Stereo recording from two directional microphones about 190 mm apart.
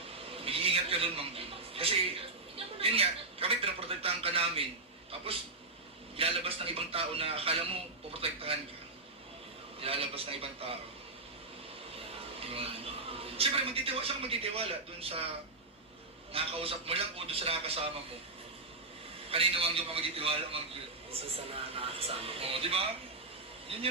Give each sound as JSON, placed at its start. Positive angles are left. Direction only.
{"t": 0.4, "sound": "a sound", "side_deg": -30}
{"t": 2.7, "sound": "a man's voice", "side_deg": -30}
{"t": 9.8, "sound": "a man's voice", "side_deg": -30}
{"t": 12.4, "sound": "a man's voice", "side_deg": -30}
{"t": 16.3, "sound": "speech", "side_deg": -30}
{"t": 19.3, "sound": "a man's voice", "side_deg": -30}
{"t": 21.8, "sound": "speech", "side_deg": -30}